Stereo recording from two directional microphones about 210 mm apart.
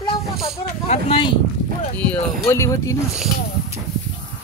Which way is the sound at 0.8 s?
30° left (ahead or behind).